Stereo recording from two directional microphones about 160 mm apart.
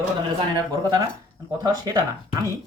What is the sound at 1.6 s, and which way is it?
Speech, 25° right (ahead or behind).